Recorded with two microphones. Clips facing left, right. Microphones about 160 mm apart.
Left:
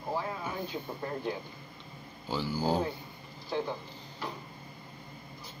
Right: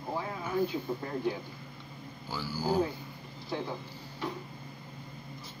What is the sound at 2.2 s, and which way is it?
Speech, 20° left (ahead or behind).